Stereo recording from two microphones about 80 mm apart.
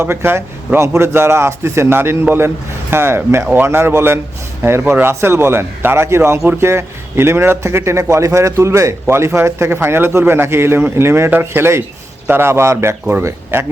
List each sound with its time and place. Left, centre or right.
0.0 s a man's voice: right